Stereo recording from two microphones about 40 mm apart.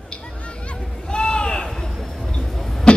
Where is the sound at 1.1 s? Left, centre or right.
Left.